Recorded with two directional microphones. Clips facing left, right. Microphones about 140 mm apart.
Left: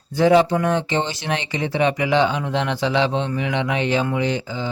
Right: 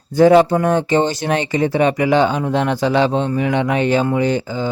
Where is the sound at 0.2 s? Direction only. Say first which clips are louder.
Right 5 dB; 45° right (ahead or behind).